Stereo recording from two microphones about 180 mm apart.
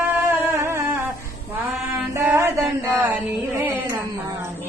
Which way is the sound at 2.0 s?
10° right (ahead or behind).